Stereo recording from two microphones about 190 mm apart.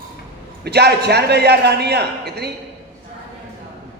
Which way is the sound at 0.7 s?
60° right (ahead or behind).